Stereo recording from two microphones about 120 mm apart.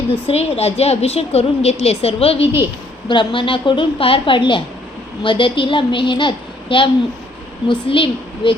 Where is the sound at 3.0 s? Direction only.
45° left (ahead or behind).